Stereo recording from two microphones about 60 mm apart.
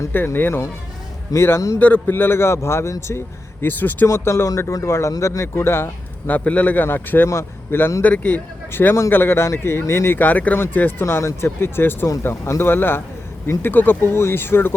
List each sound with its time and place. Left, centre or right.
0.3 s a man's voice: left
2.0 s a man's voice: left
3.7 s speech: left
4.0 s a man's voice: left
4.7 s speech: left
5.5 s a man's voice: left
6.2 s speech: left
6.8 s speech: left
7.3 s speech: left
8.0 s a man's voice: left
10.2 s speech: left
11.0 s a man's voice: left